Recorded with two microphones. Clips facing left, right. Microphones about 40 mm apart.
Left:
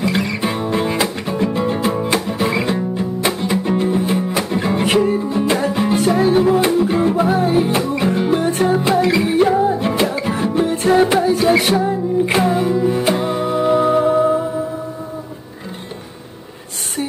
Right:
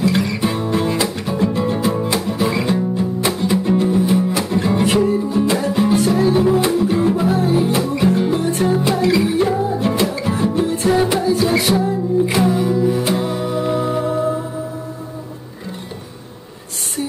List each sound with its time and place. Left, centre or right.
0.0 s music: centre
5.9 s music: left
8.3 s music: left